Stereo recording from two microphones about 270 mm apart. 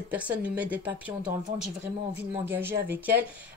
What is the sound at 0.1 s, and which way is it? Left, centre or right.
Speech, centre.